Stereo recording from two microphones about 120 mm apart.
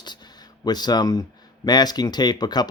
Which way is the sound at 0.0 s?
35° left (ahead or behind).